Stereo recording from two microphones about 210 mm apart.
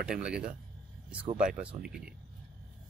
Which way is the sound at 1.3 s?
40° right (ahead or behind).